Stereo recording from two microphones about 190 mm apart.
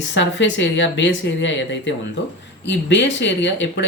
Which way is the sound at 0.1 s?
75° left (ahead or behind).